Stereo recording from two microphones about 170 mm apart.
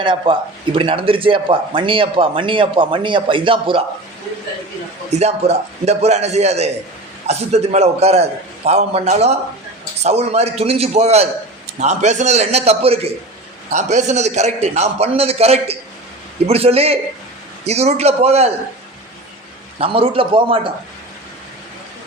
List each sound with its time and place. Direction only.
0.0 s a man's voice: 30° right (ahead or behind)
5.1 s a man's voice: 40° right (ahead or behind)
19.8 s a man's voice: 30° right (ahead or behind)